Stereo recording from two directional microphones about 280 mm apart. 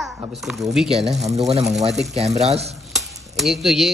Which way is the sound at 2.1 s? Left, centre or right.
Right.